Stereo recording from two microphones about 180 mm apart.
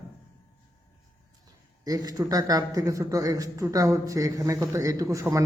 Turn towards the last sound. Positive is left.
turn(degrees=-15)  # may be behind; listen again after turning